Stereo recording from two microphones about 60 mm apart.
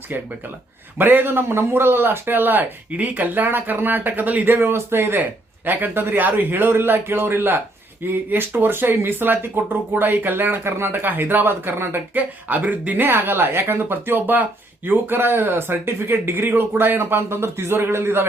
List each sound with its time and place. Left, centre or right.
0.1 s speech: right